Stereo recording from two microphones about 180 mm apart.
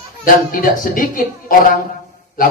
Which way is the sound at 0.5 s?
50° left (ahead or behind).